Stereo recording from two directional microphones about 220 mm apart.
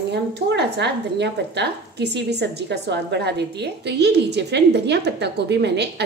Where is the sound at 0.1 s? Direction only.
50° right (ahead or behind).